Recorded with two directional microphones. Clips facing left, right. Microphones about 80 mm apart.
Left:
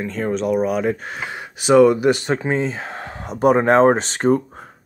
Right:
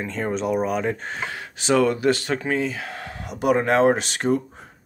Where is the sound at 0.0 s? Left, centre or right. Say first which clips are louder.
Left 3 dB; centre.